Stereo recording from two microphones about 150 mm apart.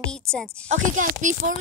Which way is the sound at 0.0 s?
5° left (ahead or behind).